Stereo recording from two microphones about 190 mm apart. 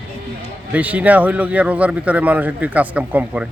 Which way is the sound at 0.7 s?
10° right (ahead or behind).